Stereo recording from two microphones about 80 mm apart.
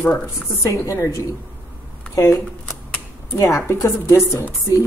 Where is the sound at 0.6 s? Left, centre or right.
Left.